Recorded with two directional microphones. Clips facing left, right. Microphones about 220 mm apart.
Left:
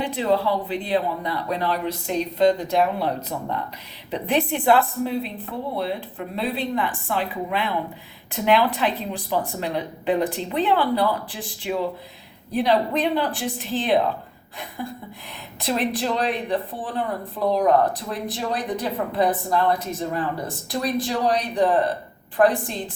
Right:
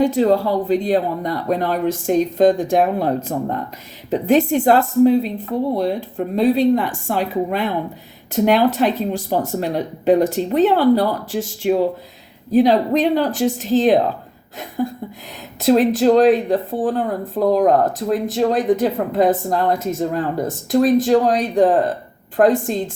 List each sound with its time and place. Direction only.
0.0 s speech: 45° right (ahead or behind)